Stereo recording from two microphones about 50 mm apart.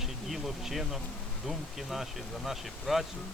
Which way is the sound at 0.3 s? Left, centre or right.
Centre.